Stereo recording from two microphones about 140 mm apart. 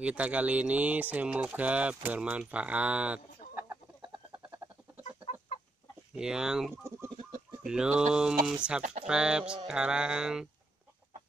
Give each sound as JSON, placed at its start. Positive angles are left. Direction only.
{"t": 0.0, "sound": "speech", "side_deg": -10}
{"t": 6.1, "sound": "speech", "side_deg": -5}
{"t": 6.7, "sound": "speech", "side_deg": -20}
{"t": 7.6, "sound": "speech", "side_deg": -5}